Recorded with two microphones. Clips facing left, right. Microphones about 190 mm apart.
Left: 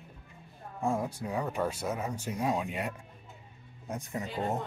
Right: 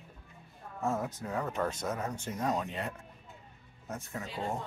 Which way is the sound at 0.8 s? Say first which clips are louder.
Left 2 dB; 10° left (ahead or behind).